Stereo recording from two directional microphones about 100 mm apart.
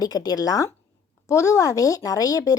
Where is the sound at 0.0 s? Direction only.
40° left (ahead or behind).